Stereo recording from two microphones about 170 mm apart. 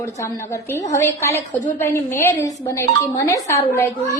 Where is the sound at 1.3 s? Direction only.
40° left (ahead or behind).